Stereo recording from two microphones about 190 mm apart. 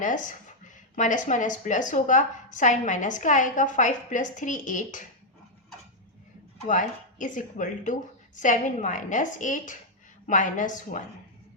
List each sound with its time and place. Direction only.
0.0 s speech: 45° left (ahead or behind)
6.7 s a woman's voice: 40° left (ahead or behind)